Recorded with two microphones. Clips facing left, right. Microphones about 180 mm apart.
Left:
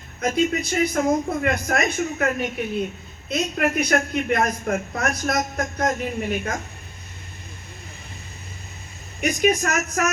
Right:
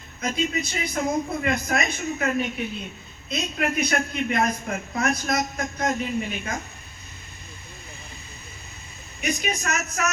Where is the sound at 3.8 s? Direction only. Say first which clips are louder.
Left 3 dB; 55° left (ahead or behind).